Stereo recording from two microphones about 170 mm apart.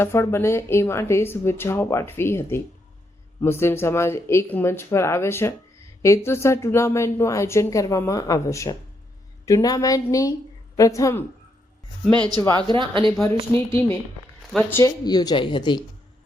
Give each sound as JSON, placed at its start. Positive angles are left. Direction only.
{"t": 0.0, "sound": "a woman's voice", "side_deg": 15}
{"t": 12.0, "sound": "a woman's voice", "side_deg": 5}
{"t": 12.5, "sound": "speech", "side_deg": -25}
{"t": 13.7, "sound": "a woman's voice", "side_deg": 15}
{"t": 14.4, "sound": "speech", "side_deg": 0}
{"t": 14.7, "sound": "a woman's voice", "side_deg": 20}